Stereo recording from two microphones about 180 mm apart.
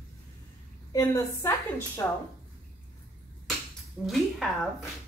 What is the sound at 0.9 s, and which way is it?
A woman's voice, 15° left (ahead or behind).